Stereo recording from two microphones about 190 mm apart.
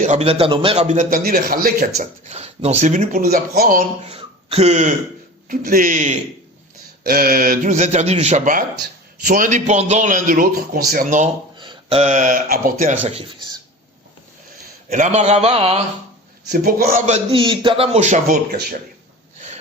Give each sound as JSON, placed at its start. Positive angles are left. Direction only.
{"t": 0.0, "sound": "a man's voice", "side_deg": -35}
{"t": 2.0, "sound": "speech", "side_deg": -35}
{"t": 4.2, "sound": "a sound", "side_deg": -30}
{"t": 5.5, "sound": "speech", "side_deg": -45}
{"t": 7.0, "sound": "speech", "side_deg": -50}
{"t": 11.6, "sound": "speech", "side_deg": -30}
{"t": 14.8, "sound": "a man's voice", "side_deg": -40}
{"t": 16.5, "sound": "speech", "side_deg": -50}
{"t": 17.3, "sound": "a man's voice", "side_deg": -25}